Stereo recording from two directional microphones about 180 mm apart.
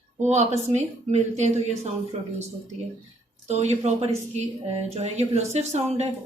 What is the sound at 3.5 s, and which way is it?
A woman's voice, 40° right (ahead or behind).